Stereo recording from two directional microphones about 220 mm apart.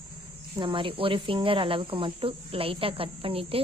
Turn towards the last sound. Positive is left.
turn(degrees=-25)  # may be behind; listen again after turning